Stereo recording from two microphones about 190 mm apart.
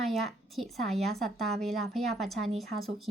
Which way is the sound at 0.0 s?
Centre (ahead or behind).